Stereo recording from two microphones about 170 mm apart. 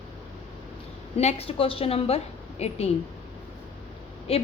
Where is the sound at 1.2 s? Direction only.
40° left (ahead or behind).